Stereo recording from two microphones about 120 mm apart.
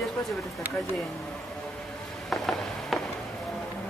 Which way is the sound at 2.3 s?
Centre (ahead or behind).